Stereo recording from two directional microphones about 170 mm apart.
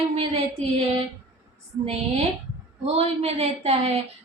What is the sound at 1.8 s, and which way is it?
Speech, 40° right (ahead or behind).